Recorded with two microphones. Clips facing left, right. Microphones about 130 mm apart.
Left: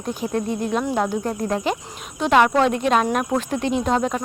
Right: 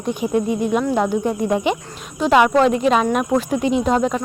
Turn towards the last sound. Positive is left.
turn(degrees=0)  # may be behind; listen again after turning